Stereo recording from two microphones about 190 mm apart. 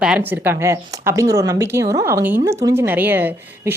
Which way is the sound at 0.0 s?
5° right (ahead or behind).